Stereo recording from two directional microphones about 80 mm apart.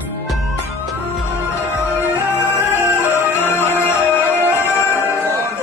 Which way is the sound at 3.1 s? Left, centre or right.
Left.